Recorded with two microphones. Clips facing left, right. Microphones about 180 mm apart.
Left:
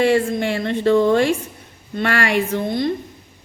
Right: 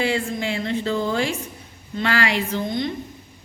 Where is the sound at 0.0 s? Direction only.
60° left (ahead or behind).